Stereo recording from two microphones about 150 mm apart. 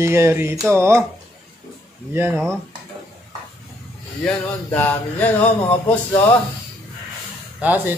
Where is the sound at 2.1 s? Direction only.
15° right (ahead or behind).